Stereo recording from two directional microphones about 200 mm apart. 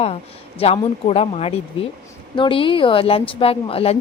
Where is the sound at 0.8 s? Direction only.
30° left (ahead or behind).